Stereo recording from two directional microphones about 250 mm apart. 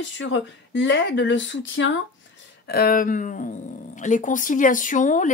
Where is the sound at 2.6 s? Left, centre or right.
Left.